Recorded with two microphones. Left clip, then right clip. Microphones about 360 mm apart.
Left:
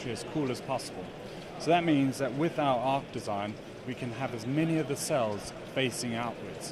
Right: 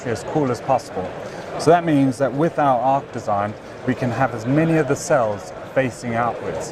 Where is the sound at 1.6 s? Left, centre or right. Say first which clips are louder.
Right 11 dB; right.